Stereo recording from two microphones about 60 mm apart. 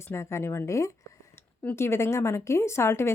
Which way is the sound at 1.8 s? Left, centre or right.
Left.